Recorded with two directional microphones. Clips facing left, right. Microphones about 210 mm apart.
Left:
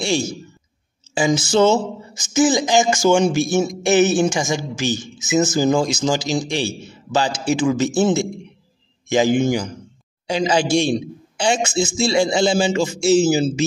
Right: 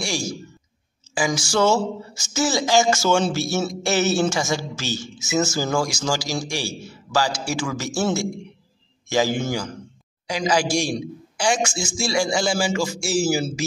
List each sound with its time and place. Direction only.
1.1 s a man's voice: 25° left (ahead or behind)